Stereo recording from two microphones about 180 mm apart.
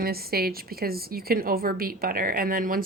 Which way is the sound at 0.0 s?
60° right (ahead or behind).